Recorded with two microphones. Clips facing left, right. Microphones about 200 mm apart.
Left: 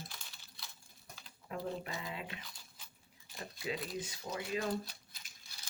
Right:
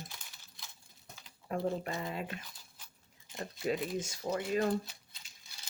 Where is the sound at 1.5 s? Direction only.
45° right (ahead or behind).